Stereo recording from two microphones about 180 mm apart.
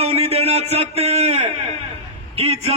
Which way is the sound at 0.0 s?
35° right (ahead or behind).